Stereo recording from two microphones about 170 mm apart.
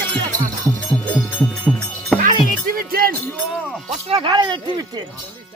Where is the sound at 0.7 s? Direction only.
10° left (ahead or behind).